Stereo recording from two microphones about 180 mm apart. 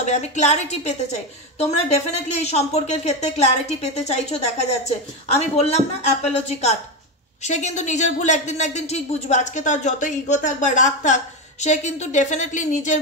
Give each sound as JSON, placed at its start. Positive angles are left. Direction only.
{"t": 0.0, "sound": "speech", "side_deg": 40}